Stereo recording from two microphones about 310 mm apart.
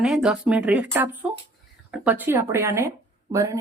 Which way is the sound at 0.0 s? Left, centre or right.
Centre.